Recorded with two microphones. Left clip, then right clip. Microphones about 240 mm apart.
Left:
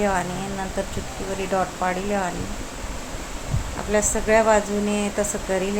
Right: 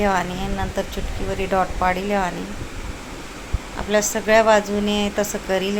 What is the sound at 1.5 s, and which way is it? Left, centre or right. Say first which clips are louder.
Speech: right 4 dB; centre.